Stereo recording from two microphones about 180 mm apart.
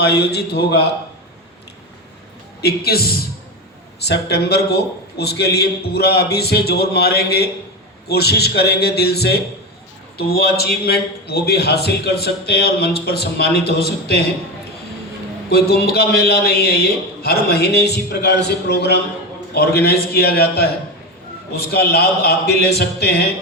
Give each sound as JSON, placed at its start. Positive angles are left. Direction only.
{"t": 0.0, "sound": "a man's voice", "side_deg": 65}
{"t": 2.6, "sound": "a man's voice", "side_deg": 60}
{"t": 15.4, "sound": "a man's voice", "side_deg": 60}